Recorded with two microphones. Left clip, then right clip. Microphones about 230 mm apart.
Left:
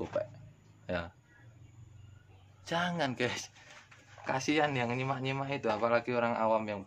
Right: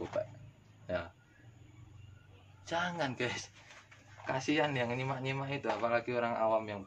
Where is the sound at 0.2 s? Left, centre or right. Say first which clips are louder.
Left 1 dB; left.